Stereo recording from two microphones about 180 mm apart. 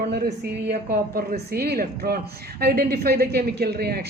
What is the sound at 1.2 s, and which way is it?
A woman's voice, 55° right (ahead or behind).